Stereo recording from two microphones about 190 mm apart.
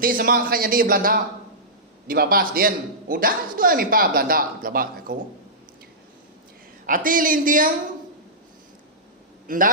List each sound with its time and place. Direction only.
0.0 s a man's voice: 50° right (ahead or behind)
6.8 s a man's voice: 45° right (ahead or behind)
9.5 s a man's voice: 45° right (ahead or behind)